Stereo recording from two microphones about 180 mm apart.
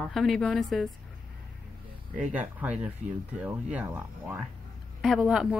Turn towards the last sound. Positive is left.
turn(degrees=0)  # may be behind; listen again after turning